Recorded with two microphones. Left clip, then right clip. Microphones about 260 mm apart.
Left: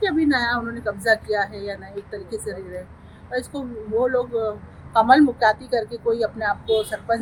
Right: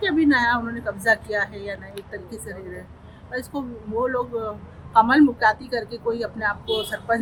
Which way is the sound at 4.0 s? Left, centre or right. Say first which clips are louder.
Left 3 dB; centre.